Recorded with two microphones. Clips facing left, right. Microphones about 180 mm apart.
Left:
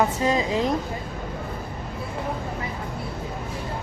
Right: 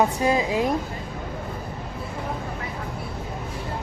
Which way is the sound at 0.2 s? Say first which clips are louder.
Right 1 dB; 10° right (ahead or behind).